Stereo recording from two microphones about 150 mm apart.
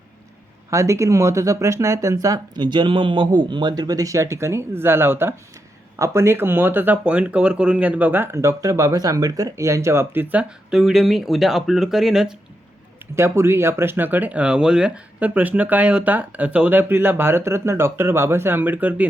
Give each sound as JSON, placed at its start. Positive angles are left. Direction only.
{"t": 0.7, "sound": "speech", "side_deg": -20}
{"t": 10.7, "sound": "speech", "side_deg": -5}
{"t": 13.1, "sound": "speech", "side_deg": -20}